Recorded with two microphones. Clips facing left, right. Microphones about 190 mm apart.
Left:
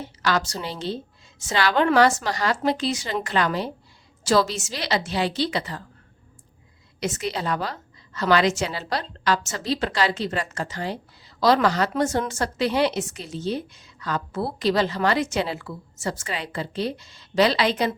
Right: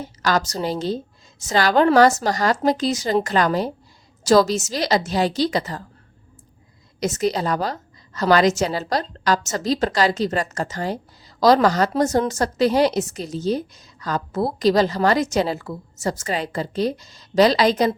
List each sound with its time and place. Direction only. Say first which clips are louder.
0.0 s a woman's voice: right 3 dB; 40° right (ahead or behind)
7.0 s a woman's voice: right 6 dB; 40° right (ahead or behind)